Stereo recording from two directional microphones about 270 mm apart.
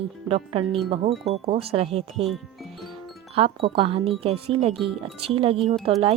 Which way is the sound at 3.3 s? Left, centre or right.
Centre.